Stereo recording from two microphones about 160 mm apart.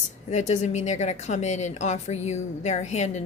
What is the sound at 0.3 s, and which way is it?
A woman's voice, 45° left (ahead or behind).